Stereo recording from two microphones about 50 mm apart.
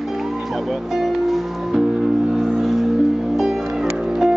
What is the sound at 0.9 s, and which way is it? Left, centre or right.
Music, centre.